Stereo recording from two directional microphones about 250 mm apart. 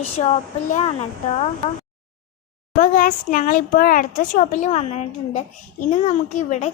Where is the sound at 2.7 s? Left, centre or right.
Left.